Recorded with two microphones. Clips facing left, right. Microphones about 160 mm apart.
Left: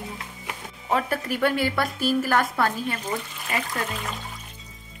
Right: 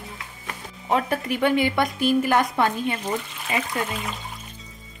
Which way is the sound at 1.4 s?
15° right (ahead or behind).